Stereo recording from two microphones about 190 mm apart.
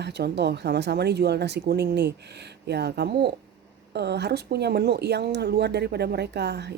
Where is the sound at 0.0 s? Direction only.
60° right (ahead or behind).